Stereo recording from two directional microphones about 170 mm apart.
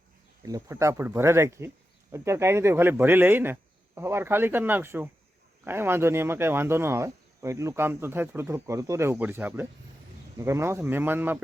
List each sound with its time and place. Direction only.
0.4 s speech: 20° right (ahead or behind)